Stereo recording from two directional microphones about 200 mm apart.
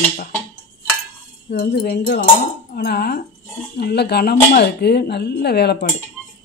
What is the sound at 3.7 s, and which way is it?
Speech, 55° left (ahead or behind).